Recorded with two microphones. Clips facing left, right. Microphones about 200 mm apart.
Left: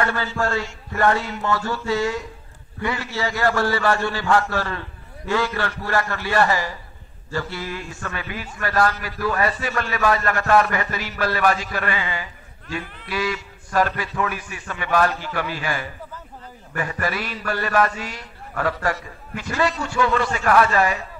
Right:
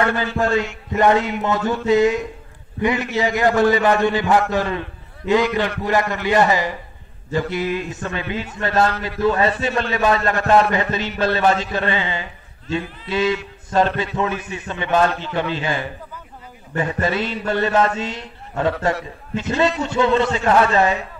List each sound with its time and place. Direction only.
0.0 s a man's voice: 20° right (ahead or behind)